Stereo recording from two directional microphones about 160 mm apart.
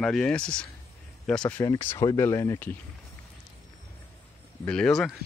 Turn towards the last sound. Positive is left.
turn(degrees=0)  # may be behind; listen again after turning